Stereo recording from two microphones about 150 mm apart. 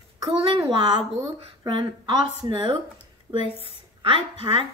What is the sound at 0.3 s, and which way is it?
A child's voice, 40° right (ahead or behind).